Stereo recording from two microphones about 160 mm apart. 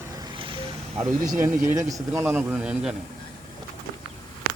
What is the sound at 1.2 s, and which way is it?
Speech, 55° right (ahead or behind).